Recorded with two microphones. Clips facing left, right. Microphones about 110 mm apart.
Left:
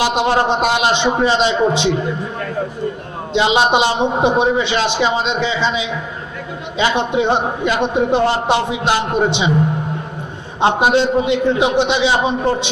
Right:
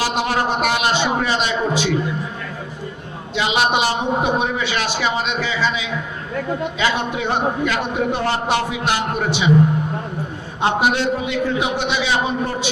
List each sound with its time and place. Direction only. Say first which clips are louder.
0.0 s a man's voice: left 5 dB; 20° left (ahead or behind)
3.3 s a man's voice: left 5 dB; 25° left (ahead or behind)
10.6 s a man's voice: left 4 dB; 20° left (ahead or behind)